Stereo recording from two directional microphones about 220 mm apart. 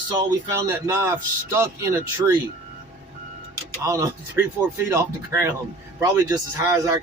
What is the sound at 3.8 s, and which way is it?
Speech, 15° right (ahead or behind).